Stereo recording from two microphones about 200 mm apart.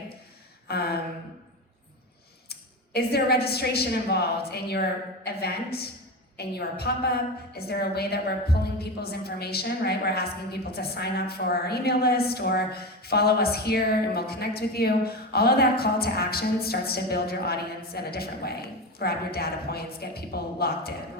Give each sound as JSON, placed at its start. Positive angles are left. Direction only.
{"t": 0.7, "sound": "a woman's voice", "side_deg": 50}
{"t": 2.5, "sound": "a woman's voice", "side_deg": 50}